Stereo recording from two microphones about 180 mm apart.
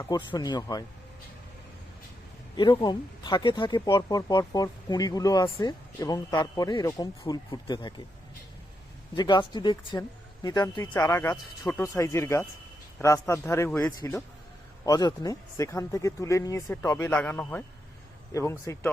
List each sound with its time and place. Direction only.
0.0 s speech: 25° left (ahead or behind)
2.6 s speech: 25° left (ahead or behind)
9.1 s speech: 25° left (ahead or behind); by 14.3 s 10° left (ahead or behind)
14.8 s speech: 20° left (ahead or behind)